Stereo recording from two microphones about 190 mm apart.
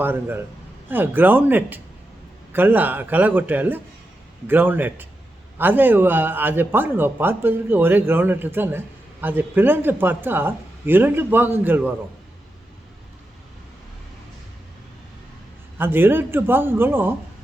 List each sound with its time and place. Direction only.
0.0 s speech: 10° right (ahead or behind)
15.8 s speech: 10° right (ahead or behind)